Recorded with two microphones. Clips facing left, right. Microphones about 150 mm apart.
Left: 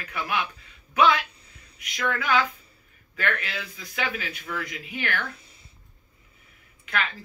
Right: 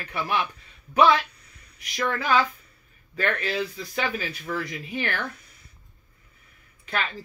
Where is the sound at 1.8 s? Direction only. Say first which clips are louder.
Right 1 dB; 35° right (ahead or behind).